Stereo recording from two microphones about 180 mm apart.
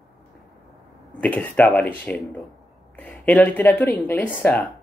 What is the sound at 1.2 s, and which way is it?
Speech, 10° left (ahead or behind).